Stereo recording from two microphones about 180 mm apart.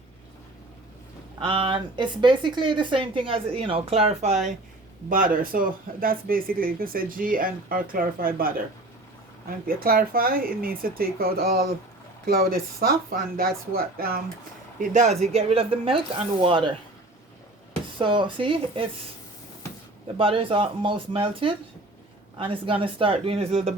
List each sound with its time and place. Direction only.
1.4 s speech: 30° right (ahead or behind)
5.0 s speech: 50° right (ahead or behind)
9.6 s speech: 55° right (ahead or behind)
14.8 s speech: 40° right (ahead or behind)
17.9 s speech: 25° right (ahead or behind)
20.1 s speech: 30° right (ahead or behind)